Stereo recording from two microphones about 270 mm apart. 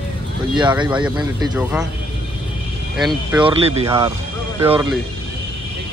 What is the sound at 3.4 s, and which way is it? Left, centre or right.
Speech, centre.